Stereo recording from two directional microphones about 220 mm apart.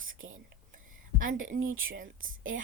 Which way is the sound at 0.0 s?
65° right (ahead or behind).